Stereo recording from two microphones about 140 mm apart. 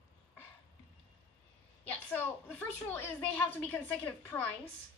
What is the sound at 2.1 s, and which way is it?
A woman's voice, 15° left (ahead or behind).